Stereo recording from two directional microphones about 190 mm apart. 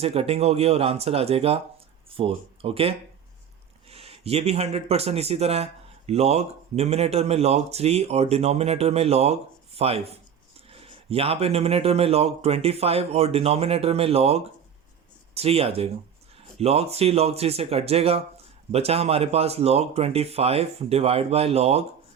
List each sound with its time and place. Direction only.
0.0 s speech: 30° right (ahead or behind)